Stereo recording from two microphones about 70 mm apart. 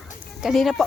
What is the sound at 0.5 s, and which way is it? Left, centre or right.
Speech, centre.